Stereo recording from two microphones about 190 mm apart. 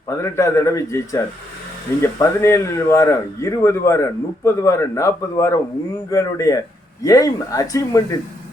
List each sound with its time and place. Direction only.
0.1 s speech: 15° left (ahead or behind)